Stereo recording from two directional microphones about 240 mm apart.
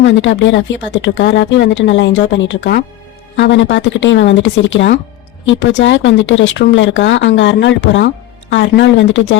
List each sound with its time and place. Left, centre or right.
0.0 s speech: left